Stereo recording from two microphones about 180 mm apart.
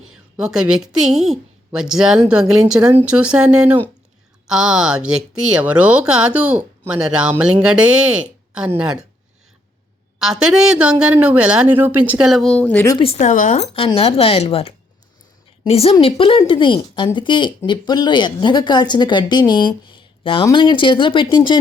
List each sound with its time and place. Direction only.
0.1 s a woman's voice: 5° right (ahead or behind)
10.2 s a woman's voice: centre (ahead or behind)
12.9 s a woman's voice: 30° left (ahead or behind)